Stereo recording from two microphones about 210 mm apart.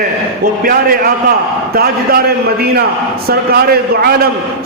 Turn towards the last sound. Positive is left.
turn(degrees=-45)  # may be behind; listen again after turning